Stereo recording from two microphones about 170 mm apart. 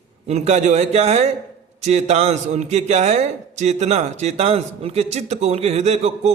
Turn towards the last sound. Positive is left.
turn(degrees=-40)  # may be behind; listen again after turning